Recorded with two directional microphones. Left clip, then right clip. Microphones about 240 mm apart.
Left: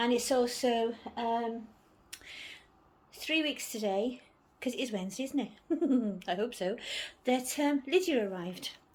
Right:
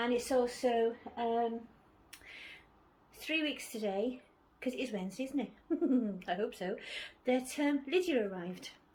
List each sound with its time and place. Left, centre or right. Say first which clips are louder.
0.0 s a woman's voice: left 3 dB; left
2.1 s a sound: left 6 dB; left
3.1 s a woman's voice: left 4 dB; left